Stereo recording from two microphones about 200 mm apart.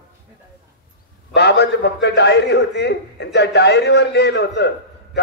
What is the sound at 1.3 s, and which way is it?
A man's voice, 60° left (ahead or behind).